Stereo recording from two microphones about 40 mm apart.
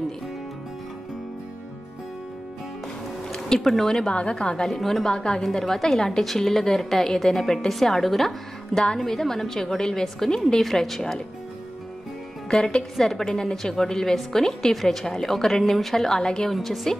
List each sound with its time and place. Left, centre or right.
3.3 s music: centre
3.6 s a woman's voice: centre
4.1 s a woman's voice: left
4.6 s a woman's voice: centre
5.0 s a woman's voice: centre
5.4 s a woman's voice: centre
12.4 s a woman's voice: centre